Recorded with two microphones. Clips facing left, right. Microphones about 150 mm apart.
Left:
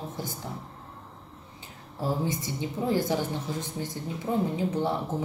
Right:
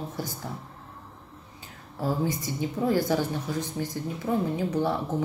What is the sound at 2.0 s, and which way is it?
A woman's voice, 25° left (ahead or behind).